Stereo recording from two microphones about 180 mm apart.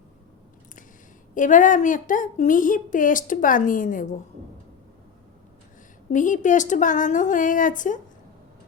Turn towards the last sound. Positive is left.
turn(degrees=45)  # may be behind; listen again after turning